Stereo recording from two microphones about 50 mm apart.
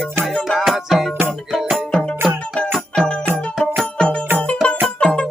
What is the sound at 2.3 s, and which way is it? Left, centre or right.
Music, left.